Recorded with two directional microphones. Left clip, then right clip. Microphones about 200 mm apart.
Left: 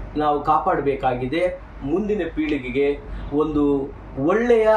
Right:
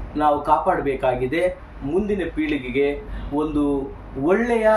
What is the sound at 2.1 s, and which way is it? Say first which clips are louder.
Speech: even; 10° right (ahead or behind).